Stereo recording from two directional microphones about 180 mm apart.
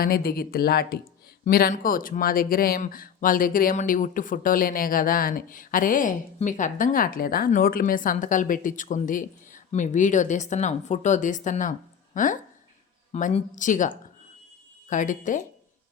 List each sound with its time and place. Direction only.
0.0 s speech: 60° left (ahead or behind)